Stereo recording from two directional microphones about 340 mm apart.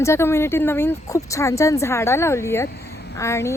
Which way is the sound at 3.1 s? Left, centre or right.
Centre.